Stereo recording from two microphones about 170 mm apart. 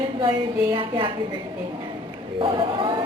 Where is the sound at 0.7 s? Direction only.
30° right (ahead or behind).